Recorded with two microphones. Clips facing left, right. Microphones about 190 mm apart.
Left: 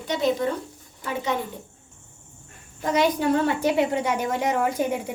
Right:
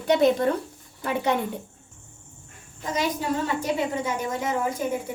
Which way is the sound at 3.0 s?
65° left (ahead or behind).